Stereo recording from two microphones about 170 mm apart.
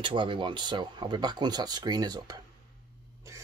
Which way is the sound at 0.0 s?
30° right (ahead or behind).